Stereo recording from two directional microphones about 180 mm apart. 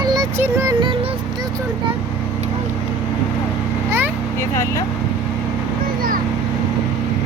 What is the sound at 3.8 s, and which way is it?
Vehicle, 10° right (ahead or behind).